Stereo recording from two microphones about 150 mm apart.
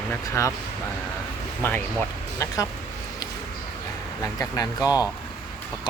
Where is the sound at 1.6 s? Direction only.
15° left (ahead or behind).